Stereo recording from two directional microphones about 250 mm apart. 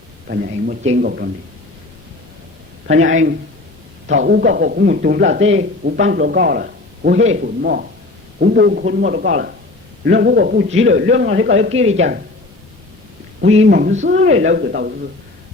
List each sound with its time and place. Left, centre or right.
0.3 s a man's voice: right
2.8 s a man's voice: right
11.7 s speech: right
13.7 s a man's voice: right